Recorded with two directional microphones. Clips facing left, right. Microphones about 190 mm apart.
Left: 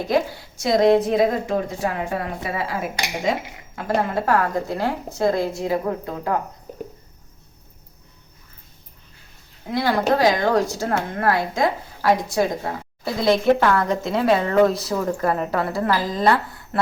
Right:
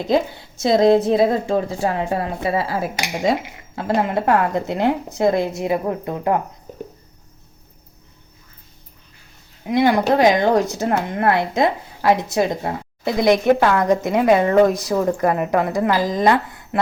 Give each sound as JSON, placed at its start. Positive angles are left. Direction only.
{"t": 0.0, "sound": "a woman's voice", "side_deg": -25}
{"t": 9.6, "sound": "a woman's voice", "side_deg": -15}